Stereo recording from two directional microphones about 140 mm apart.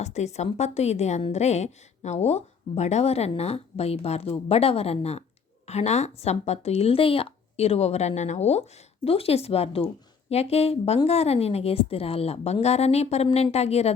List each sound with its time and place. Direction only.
0.0 s a woman's voice: 55° left (ahead or behind)